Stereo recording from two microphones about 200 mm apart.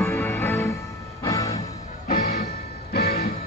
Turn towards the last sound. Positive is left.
turn(degrees=50)  # may be behind; listen again after turning